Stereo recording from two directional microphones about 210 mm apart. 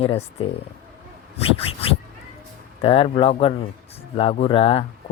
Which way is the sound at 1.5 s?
25° left (ahead or behind).